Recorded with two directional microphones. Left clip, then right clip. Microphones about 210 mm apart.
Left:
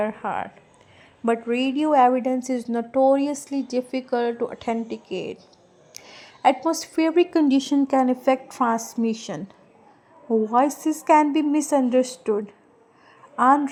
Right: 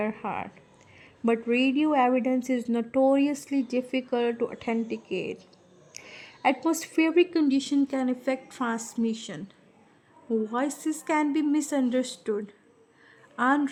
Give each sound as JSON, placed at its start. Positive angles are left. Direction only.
{"t": 0.0, "sound": "a woman's voice", "side_deg": -5}
{"t": 6.0, "sound": "a sound", "side_deg": 40}
{"t": 6.4, "sound": "a woman's voice", "side_deg": -5}
{"t": 10.4, "sound": "a woman's voice", "side_deg": 5}